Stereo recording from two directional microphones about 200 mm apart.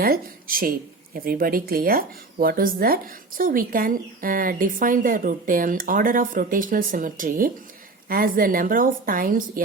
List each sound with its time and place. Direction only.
0.0 s speech: 45° right (ahead or behind)